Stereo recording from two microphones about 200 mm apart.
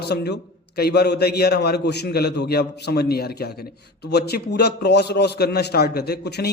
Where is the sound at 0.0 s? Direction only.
55° left (ahead or behind).